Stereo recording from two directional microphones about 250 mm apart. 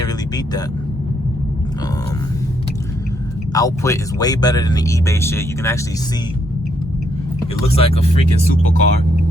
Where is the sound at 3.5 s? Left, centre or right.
Centre.